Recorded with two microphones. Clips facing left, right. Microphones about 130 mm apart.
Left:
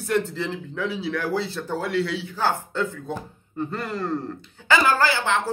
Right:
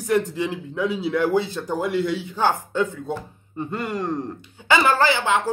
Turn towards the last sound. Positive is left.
turn(degrees=-15)  # may be behind; listen again after turning